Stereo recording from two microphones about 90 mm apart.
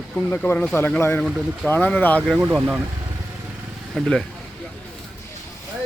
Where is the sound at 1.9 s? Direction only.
20° left (ahead or behind).